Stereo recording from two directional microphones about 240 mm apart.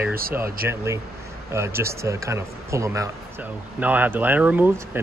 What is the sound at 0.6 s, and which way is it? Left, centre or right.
Speech, right.